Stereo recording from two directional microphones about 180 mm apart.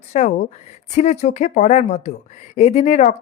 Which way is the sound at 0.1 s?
40° left (ahead or behind).